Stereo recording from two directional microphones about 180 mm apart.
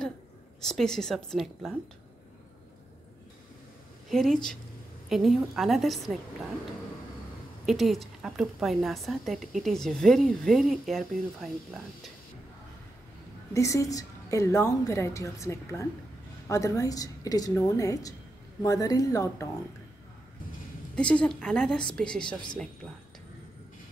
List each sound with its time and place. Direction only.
0.6 s a woman's voice: centre (ahead or behind)
4.1 s a woman's voice: centre (ahead or behind)
7.6 s a woman's voice: centre (ahead or behind)
13.5 s a woman's voice: 15° left (ahead or behind)
20.9 s a woman's voice: 5° left (ahead or behind)